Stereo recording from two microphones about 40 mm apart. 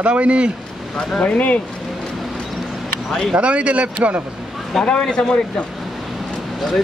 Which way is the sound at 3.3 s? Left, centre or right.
Right.